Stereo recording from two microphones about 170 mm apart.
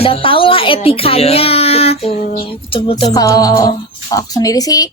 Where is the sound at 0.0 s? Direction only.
35° left (ahead or behind).